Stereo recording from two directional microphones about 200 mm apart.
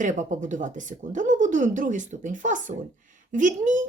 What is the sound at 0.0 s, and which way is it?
Speech, 40° right (ahead or behind).